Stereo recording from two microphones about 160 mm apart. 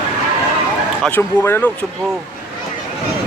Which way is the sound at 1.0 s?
10° left (ahead or behind).